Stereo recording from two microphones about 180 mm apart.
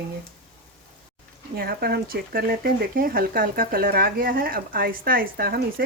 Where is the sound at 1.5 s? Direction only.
60° right (ahead or behind).